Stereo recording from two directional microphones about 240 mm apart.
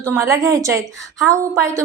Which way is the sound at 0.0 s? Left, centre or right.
Centre.